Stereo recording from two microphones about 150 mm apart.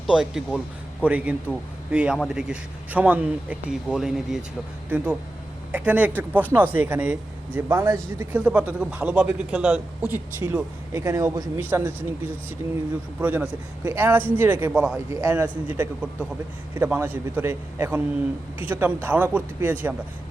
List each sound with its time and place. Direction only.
0.1 s a man's voice: 5° right (ahead or behind)
13.1 s a man's voice: 10° right (ahead or behind)
14.9 s a man's voice: 15° right (ahead or behind)